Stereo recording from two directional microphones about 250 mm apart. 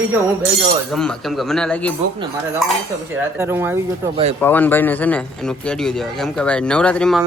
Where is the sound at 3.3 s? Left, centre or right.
Centre.